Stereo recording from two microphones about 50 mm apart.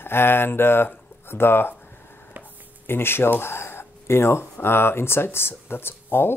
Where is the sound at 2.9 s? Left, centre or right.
Left.